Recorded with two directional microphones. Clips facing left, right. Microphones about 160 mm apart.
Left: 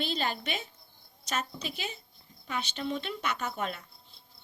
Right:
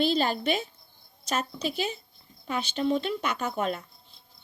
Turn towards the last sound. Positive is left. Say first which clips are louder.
# right 5 dB
turn(degrees=-40)  # may be behind; listen again after turning